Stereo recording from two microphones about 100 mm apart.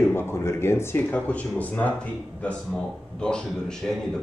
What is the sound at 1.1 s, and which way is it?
Speech, 15° left (ahead or behind).